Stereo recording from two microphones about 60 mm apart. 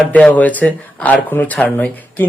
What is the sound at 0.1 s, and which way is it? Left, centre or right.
Speech, left.